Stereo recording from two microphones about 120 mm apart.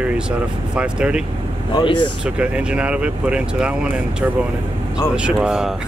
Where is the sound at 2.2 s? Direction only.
10° right (ahead or behind).